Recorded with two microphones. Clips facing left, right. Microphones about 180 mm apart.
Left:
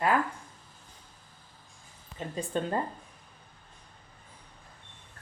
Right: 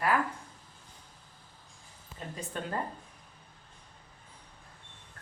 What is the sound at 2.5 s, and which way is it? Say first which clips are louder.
Speech: left 7 dB; 30° left (ahead or behind).